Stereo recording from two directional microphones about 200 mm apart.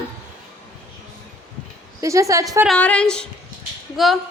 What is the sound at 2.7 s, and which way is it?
A woman's voice, 5° left (ahead or behind).